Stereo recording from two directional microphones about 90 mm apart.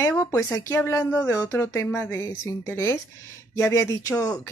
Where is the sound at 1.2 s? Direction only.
40° left (ahead or behind).